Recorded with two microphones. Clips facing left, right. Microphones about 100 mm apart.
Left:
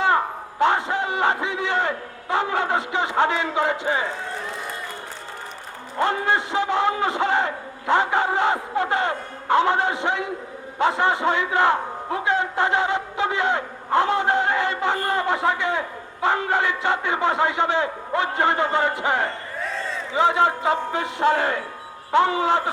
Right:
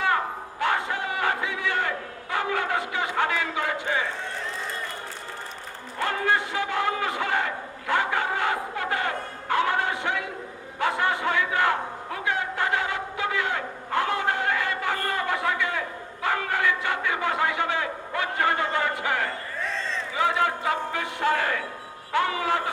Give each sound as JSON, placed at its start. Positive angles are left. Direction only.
{"t": 0.6, "sound": "a sound", "side_deg": 25}
{"t": 2.3, "sound": "a man's voice", "side_deg": 25}
{"t": 6.0, "sound": "a man's voice", "side_deg": 25}
{"t": 19.5, "sound": "crowd", "side_deg": 10}
{"t": 20.1, "sound": "a man's voice", "side_deg": 25}